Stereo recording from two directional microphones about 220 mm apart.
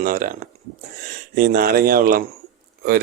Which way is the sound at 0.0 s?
40° right (ahead or behind).